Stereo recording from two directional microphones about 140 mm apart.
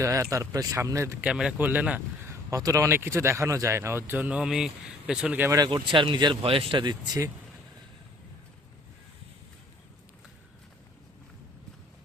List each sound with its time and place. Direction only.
0.0 s speech: 20° right (ahead or behind)
1.2 s speech: 5° right (ahead or behind)
2.2 s speech: 20° right (ahead or behind)
5.5 s speech: 30° right (ahead or behind)